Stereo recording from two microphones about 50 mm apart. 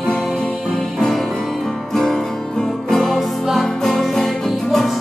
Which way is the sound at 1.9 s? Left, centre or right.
Centre.